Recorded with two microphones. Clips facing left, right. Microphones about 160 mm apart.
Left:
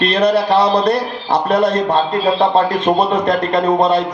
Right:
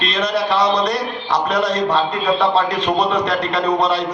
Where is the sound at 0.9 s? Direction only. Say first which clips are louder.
Left 4 dB; 55° left (ahead or behind).